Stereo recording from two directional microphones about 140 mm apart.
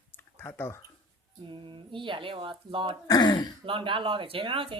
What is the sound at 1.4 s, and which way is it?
Speech, 35° right (ahead or behind).